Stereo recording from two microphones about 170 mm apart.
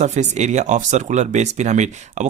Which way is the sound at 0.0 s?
45° right (ahead or behind).